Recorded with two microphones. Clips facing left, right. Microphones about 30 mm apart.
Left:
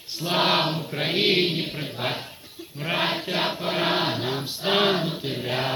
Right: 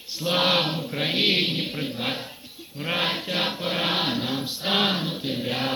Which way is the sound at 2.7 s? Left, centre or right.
Centre.